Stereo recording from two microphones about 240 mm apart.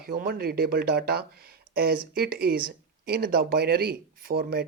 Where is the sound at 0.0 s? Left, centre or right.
Right.